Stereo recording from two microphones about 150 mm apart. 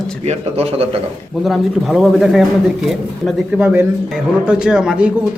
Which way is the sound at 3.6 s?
10° right (ahead or behind).